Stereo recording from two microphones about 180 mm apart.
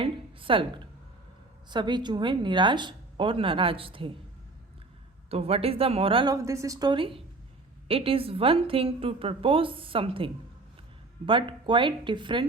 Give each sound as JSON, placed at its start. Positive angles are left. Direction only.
{"t": 0.0, "sound": "a woman's voice", "side_deg": -30}
{"t": 5.3, "sound": "a woman's voice", "side_deg": -35}
{"t": 6.3, "sound": "a woman's voice", "side_deg": -15}